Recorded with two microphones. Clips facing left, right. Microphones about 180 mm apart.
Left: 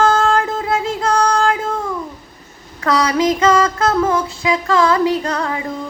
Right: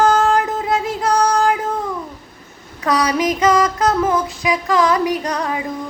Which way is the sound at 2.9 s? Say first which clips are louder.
Left 2 dB; 15° right (ahead or behind).